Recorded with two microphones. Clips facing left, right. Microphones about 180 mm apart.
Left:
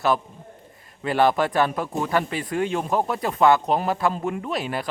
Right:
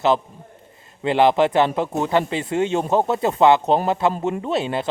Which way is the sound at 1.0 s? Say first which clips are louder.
Right 4 dB; 20° right (ahead or behind).